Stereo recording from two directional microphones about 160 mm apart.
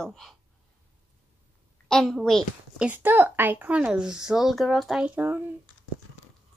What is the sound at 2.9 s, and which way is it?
Speech, 10° right (ahead or behind).